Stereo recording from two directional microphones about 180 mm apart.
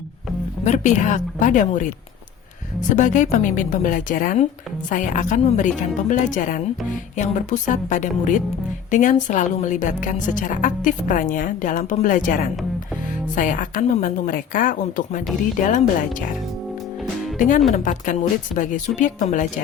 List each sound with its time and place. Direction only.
0.6 s a woman's voice: 40° left (ahead or behind)
2.9 s a woman's voice: 45° left (ahead or behind)
17.3 s a woman's voice: 45° left (ahead or behind)